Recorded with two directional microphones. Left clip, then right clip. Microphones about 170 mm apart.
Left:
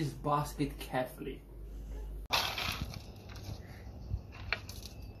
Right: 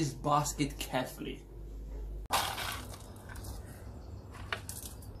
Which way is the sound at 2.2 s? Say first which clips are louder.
Even; 5° right (ahead or behind).